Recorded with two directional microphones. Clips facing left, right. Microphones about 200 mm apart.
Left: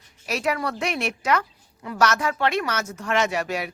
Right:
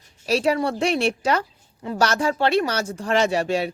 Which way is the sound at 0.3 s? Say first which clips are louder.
Right 5 dB; 30° right (ahead or behind).